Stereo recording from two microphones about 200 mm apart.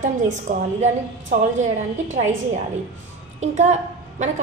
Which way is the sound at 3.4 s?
35° right (ahead or behind).